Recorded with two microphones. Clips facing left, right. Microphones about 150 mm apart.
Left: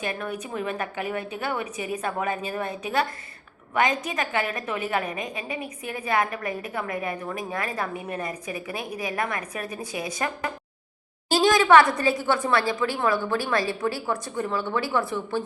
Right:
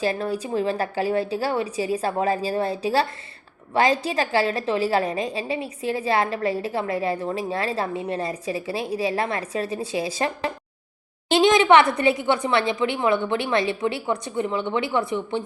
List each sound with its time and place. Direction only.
0.0 s a woman's voice: 30° right (ahead or behind)